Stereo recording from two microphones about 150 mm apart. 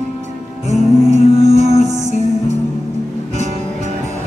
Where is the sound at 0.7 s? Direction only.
50° right (ahead or behind).